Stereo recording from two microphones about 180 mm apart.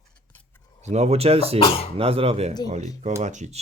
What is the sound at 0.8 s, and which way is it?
Speech, 35° right (ahead or behind).